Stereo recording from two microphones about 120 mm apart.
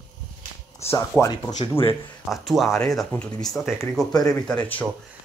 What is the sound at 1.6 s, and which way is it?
Speech, 50° left (ahead or behind).